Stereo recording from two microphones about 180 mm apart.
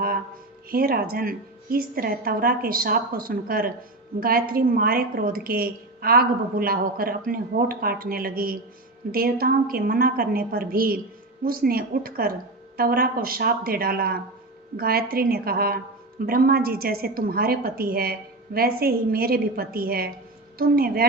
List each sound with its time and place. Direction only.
0.7 s a woman's voice: 55° right (ahead or behind)